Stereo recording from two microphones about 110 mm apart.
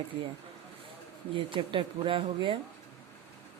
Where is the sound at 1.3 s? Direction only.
50° right (ahead or behind).